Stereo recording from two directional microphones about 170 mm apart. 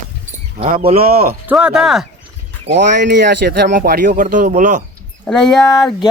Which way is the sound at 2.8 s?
90° right.